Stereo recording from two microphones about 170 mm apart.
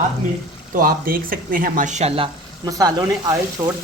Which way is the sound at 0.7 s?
55° right (ahead or behind).